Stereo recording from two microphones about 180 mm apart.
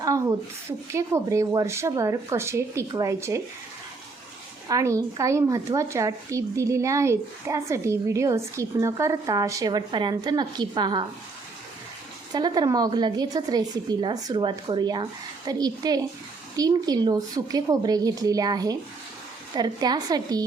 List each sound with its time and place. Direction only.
0.0 s a woman's voice: 20° right (ahead or behind)
4.7 s speech: 20° right (ahead or behind)
12.3 s a woman's voice: 20° right (ahead or behind)